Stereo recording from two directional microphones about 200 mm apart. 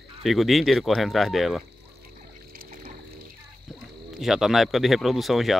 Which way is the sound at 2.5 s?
45° right (ahead or behind).